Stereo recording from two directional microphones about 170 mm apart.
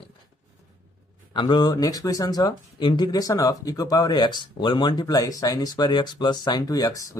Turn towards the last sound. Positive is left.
turn(degrees=20)  # may be behind; listen again after turning